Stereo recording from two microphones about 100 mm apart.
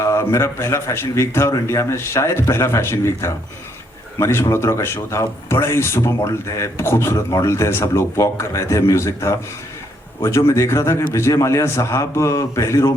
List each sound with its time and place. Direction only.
0.0 s speech: 30° left (ahead or behind)
10.5 s speech: 30° left (ahead or behind)